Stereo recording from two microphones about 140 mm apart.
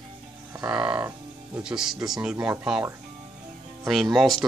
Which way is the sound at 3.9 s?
Centre (ahead or behind).